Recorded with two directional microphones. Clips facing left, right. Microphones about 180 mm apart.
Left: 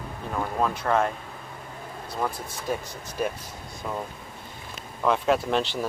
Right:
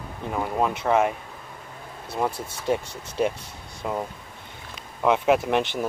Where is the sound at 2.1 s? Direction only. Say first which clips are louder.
Right 3 dB; 25° right (ahead or behind).